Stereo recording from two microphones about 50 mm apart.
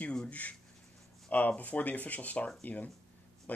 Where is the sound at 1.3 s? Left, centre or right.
Left.